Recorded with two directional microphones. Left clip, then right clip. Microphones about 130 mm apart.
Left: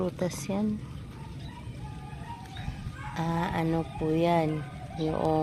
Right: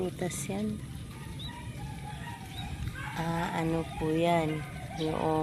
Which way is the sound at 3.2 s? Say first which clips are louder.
Left 2 dB; 40° left (ahead or behind).